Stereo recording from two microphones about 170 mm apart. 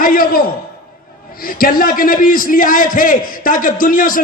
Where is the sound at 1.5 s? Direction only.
60° left (ahead or behind).